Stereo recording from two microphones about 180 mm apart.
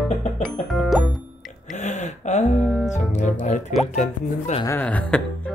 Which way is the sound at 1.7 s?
40° left (ahead or behind).